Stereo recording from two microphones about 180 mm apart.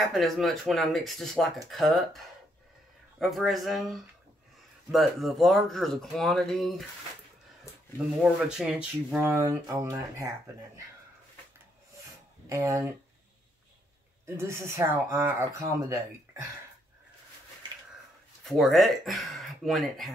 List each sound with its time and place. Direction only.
0.0 s speech: centre (ahead or behind)
8.2 s speech: 5° right (ahead or behind)
12.4 s speech: 15° right (ahead or behind)
14.2 s speech: 15° right (ahead or behind)
18.4 s speech: centre (ahead or behind)